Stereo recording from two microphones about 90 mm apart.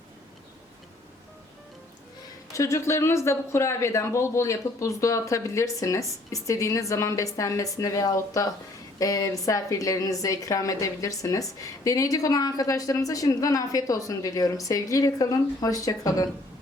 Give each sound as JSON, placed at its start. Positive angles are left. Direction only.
{"t": 2.5, "sound": "a woman's voice", "side_deg": 35}